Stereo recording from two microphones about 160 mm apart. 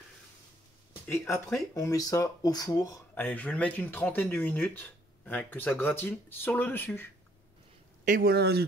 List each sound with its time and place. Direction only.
1.0 s speech: 15° left (ahead or behind)
8.0 s speech: 60° right (ahead or behind); by 8.6 s 80° right